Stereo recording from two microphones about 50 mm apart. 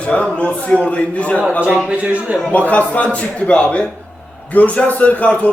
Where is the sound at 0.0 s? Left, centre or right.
Left.